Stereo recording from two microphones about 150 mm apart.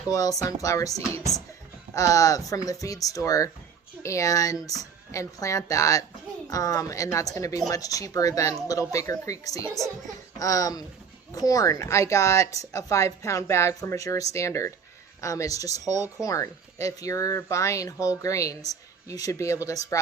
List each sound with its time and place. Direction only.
0.1 s speech: 25° left (ahead or behind)